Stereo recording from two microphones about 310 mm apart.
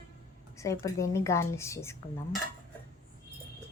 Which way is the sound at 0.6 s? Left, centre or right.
Centre.